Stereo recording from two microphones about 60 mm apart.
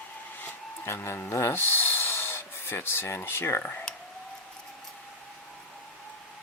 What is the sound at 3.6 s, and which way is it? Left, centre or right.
Speech, left.